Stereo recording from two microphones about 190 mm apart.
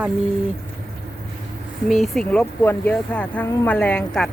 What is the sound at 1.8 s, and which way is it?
Speech, centre (ahead or behind).